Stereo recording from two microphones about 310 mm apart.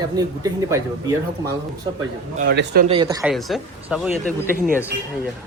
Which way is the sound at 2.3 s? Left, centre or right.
Right.